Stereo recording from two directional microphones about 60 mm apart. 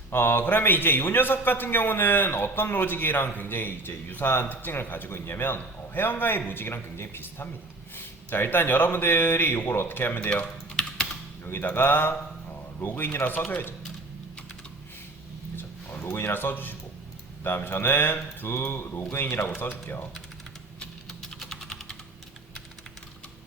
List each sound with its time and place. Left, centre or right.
0.1 s a man's voice: left
10.2 s speech: left
11.4 s a man's voice: left
15.5 s a sound: left
17.4 s a man's voice: left
19.4 s a man's voice: left
21.1 s typing: centre